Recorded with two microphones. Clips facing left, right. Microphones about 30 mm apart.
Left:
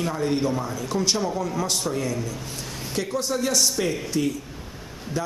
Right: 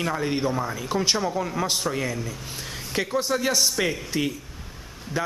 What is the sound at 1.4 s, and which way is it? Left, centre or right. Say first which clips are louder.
A man's voice: even; right.